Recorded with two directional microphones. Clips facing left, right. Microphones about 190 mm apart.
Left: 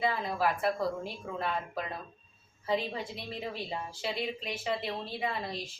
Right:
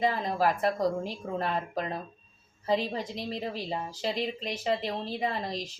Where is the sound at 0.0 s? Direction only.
40° right (ahead or behind).